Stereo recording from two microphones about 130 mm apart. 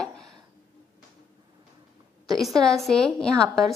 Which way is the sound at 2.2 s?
Centre (ahead or behind).